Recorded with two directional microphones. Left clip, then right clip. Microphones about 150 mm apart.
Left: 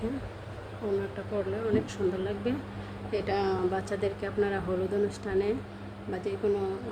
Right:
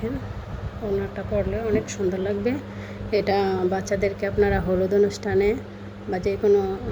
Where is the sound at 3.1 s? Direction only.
30° right (ahead or behind).